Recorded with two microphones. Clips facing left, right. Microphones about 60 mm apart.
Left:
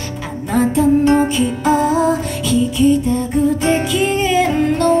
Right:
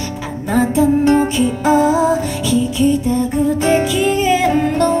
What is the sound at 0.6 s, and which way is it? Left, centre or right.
Music, centre.